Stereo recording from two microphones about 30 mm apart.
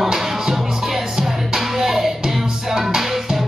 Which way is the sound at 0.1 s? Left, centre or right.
Centre.